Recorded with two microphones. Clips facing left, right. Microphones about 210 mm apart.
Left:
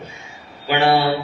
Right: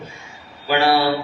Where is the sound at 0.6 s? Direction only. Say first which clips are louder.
Left 1 dB; 20° left (ahead or behind).